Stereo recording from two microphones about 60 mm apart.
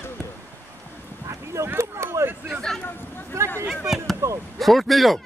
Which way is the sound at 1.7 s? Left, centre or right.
Right.